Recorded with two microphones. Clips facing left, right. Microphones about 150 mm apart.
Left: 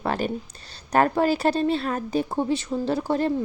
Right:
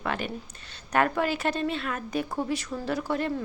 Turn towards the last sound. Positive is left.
turn(degrees=30)  # may be behind; listen again after turning